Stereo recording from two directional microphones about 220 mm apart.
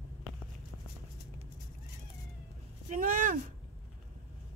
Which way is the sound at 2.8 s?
35° right (ahead or behind).